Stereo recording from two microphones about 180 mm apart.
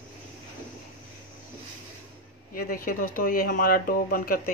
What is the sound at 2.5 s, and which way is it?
Speech, 50° left (ahead or behind).